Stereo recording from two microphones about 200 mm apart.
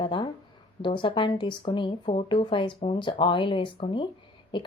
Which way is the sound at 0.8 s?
25° left (ahead or behind).